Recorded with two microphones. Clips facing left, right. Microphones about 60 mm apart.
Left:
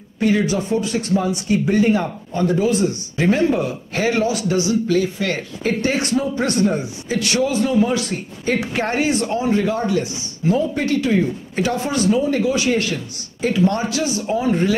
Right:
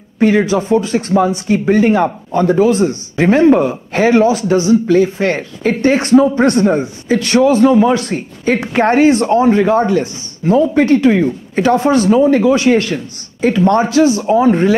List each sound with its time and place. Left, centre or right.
0.2 s speech: right